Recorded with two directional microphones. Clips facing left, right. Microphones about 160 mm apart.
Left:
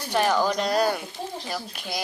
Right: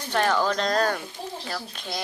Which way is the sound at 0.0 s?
10° left (ahead or behind).